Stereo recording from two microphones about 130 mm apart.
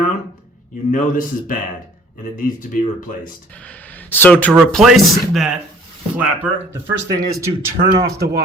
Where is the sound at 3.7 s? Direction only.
15° left (ahead or behind).